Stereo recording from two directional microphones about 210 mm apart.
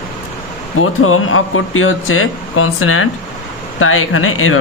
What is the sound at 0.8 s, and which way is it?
Speech, 80° left.